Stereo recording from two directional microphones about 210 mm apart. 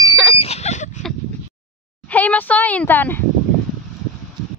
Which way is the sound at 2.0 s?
5° left (ahead or behind).